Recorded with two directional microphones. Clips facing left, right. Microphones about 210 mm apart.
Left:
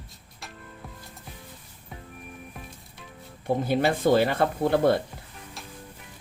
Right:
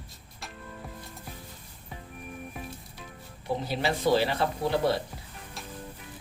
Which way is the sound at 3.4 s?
50° left (ahead or behind).